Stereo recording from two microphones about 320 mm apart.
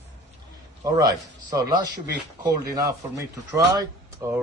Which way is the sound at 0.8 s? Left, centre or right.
Centre.